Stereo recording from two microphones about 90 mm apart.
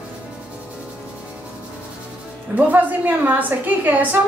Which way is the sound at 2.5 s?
20° right (ahead or behind).